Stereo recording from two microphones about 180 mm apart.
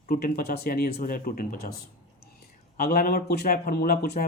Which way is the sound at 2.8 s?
55° left (ahead or behind).